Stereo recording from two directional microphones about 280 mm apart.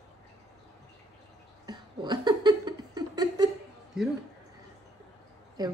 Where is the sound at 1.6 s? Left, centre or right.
Centre.